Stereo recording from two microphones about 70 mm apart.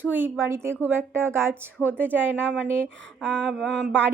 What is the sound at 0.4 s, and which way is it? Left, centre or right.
Speech, right.